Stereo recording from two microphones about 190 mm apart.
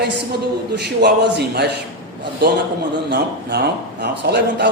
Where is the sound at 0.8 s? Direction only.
60° right (ahead or behind).